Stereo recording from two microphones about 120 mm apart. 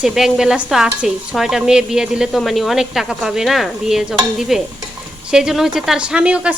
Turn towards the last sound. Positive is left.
turn(degrees=-10)  # may be behind; listen again after turning